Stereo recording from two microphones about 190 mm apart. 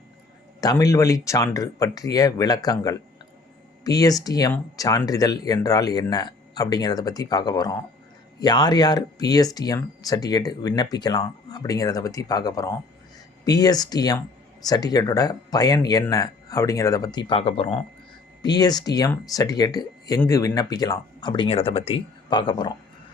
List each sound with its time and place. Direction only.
0.6 s speech: 20° left (ahead or behind)